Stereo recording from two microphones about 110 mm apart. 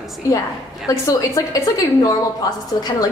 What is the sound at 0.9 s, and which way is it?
Speech, 30° left (ahead or behind).